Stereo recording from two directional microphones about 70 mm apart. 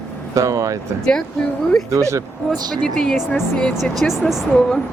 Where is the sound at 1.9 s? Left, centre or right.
Right.